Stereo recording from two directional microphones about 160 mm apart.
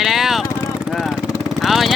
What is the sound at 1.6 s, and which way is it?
Speech, centre (ahead or behind).